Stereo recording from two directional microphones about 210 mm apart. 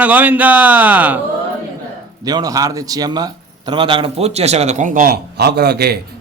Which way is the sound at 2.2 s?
15° right (ahead or behind).